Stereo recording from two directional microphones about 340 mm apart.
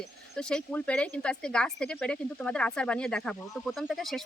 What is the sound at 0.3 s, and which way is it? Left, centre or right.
Speech, centre.